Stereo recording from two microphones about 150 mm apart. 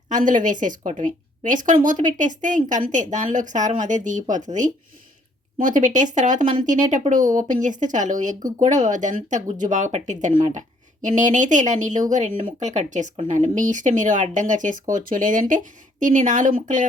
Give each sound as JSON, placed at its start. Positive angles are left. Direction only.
{"t": 0.1, "sound": "a woman's voice", "side_deg": -60}